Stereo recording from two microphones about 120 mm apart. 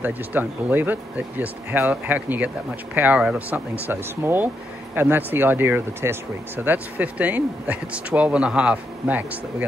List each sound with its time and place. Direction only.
0.0 s speech: 15° right (ahead or behind)